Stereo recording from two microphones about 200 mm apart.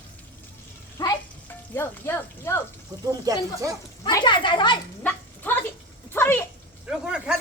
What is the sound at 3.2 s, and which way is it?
Speech, 15° right (ahead or behind).